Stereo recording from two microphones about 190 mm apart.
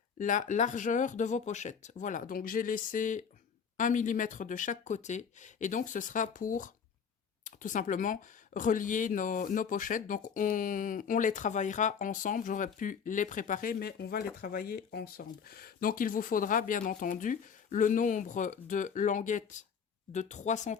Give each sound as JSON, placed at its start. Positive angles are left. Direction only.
{"t": 0.2, "sound": "speech", "side_deg": 40}